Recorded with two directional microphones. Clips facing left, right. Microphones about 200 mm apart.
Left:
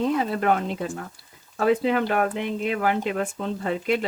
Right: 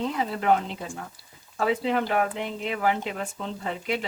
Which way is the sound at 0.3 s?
55° left (ahead or behind).